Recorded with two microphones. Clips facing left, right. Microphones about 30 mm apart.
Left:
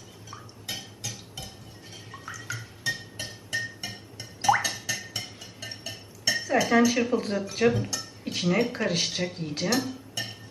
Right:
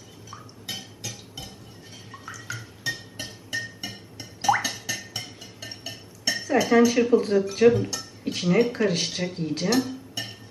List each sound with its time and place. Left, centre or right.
0.3 s drip: centre
2.1 s music: centre